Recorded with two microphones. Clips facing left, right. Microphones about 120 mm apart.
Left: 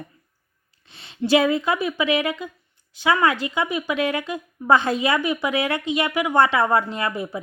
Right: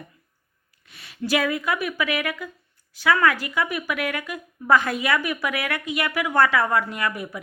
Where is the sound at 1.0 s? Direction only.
25° left (ahead or behind).